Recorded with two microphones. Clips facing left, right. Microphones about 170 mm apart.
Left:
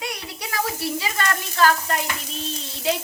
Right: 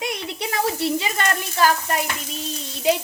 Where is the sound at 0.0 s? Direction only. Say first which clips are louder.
Right 5 dB; 25° right (ahead or behind).